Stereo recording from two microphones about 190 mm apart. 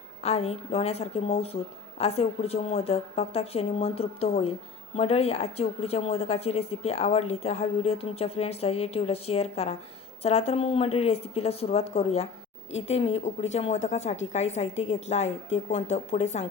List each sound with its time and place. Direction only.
0.2 s a woman's voice: 35° left (ahead or behind)